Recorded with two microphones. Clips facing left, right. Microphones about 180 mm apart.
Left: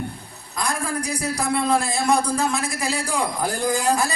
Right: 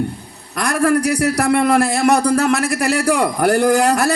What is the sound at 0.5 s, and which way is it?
A man's voice, 70° right (ahead or behind).